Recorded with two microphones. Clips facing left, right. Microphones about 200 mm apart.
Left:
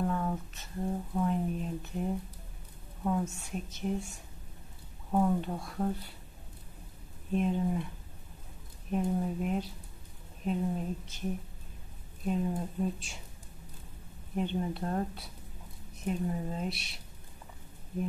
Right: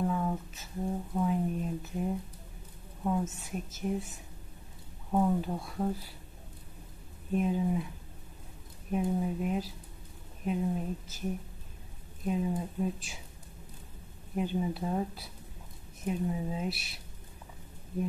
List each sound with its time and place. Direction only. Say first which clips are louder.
0.0 s a sound: right 1 dB; 5° right (ahead or behind)
3.0 s speech: even; centre (ahead or behind)
5.1 s speech: even; centre (ahead or behind)
7.3 s speech: right 1 dB; 5° right (ahead or behind)
8.9 s speech: even; 5° right (ahead or behind)
12.3 s speech: even; 5° right (ahead or behind)
14.3 s speech: right 1 dB; 5° right (ahead or behind)